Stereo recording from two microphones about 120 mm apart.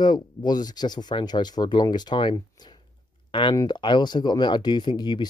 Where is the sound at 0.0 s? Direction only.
35° left (ahead or behind).